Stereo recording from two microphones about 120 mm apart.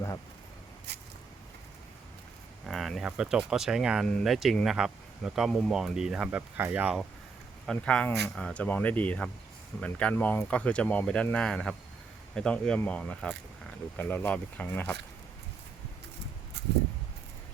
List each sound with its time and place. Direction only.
2.6 s a sound: centre (ahead or behind)
3.1 s speech: 5° right (ahead or behind)
7.7 s speech: 10° left (ahead or behind)